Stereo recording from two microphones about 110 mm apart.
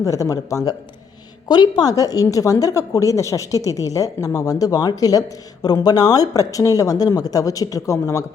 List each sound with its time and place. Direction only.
0.0 s a woman's voice: 30° left (ahead or behind)